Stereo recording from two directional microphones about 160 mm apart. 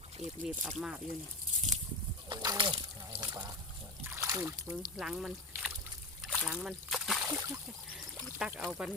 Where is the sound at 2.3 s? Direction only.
30° right (ahead or behind).